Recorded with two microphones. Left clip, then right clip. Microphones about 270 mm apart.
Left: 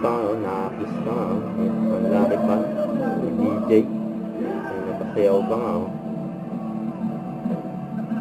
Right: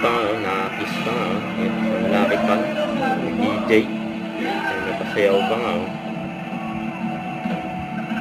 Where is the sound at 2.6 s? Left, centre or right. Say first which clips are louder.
Right 3 dB; centre.